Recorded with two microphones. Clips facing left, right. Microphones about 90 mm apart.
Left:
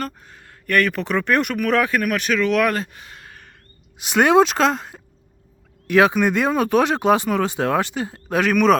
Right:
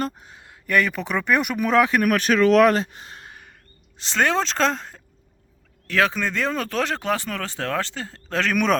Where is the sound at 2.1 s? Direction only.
35° right (ahead or behind).